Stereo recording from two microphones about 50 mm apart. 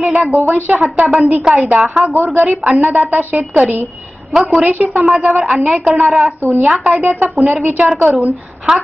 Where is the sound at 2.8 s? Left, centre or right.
Right.